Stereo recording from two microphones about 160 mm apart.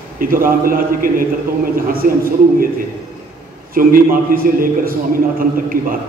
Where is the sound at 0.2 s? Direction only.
60° right (ahead or behind).